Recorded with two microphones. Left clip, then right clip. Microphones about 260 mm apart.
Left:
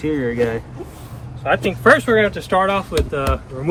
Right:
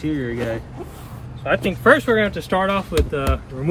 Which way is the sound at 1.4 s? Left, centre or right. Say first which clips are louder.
Left 2 dB; left.